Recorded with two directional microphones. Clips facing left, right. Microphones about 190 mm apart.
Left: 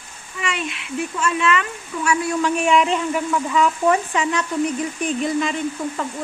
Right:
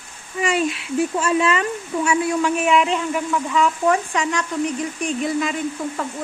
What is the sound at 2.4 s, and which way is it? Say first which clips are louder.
Speech: even; 5° right (ahead or behind).